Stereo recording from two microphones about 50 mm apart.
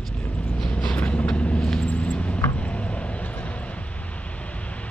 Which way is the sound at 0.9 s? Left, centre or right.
Left.